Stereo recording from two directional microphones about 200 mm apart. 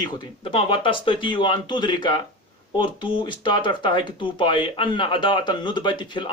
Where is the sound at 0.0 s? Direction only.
25° left (ahead or behind).